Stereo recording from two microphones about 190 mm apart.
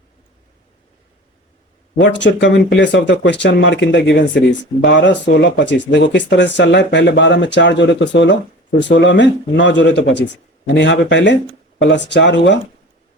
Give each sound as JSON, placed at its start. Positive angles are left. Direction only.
{"t": 2.0, "sound": "speech", "side_deg": 70}